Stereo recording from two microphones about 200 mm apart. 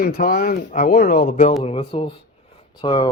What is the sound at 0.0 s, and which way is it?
Speech, 50° left (ahead or behind).